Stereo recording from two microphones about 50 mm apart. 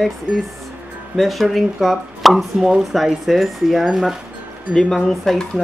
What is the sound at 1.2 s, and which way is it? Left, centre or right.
Speech, centre.